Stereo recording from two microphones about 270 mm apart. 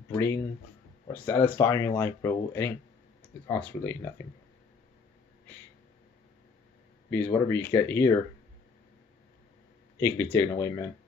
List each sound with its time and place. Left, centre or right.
0.1 s speech: centre
7.1 s speech: centre
9.9 s speech: centre